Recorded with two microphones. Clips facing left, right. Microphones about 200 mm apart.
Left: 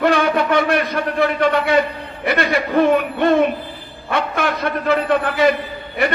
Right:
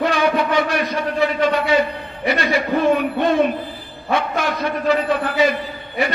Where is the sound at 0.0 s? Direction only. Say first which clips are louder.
Left 2 dB; 60° left (ahead or behind).